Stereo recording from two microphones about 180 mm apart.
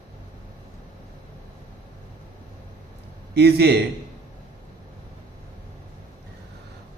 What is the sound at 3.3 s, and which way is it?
Speech, 65° right (ahead or behind).